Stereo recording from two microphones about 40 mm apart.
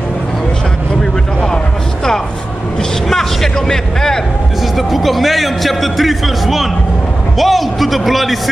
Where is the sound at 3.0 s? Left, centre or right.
Centre.